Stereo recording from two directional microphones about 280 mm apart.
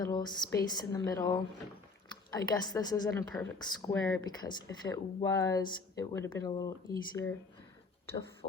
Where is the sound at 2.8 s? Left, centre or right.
Centre.